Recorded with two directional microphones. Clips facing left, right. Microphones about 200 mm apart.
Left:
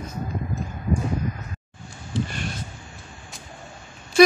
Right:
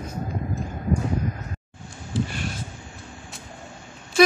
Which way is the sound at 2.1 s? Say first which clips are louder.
Right 1 dB; 5° right (ahead or behind).